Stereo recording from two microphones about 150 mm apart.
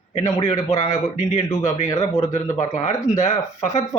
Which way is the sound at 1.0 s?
50° left (ahead or behind).